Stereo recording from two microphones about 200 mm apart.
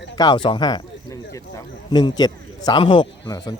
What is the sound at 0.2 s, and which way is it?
Speech, 25° left (ahead or behind).